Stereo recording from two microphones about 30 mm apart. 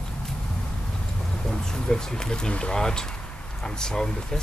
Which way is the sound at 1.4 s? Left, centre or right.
Left.